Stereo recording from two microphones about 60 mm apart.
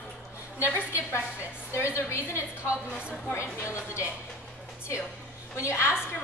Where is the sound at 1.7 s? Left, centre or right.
Left.